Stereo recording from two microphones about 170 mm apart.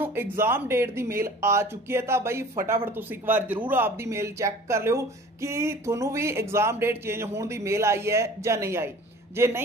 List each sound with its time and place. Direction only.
0.0 s speech: 15° right (ahead or behind)